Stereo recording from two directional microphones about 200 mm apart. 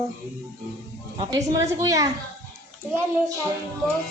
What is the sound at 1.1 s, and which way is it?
Speech, 20° right (ahead or behind).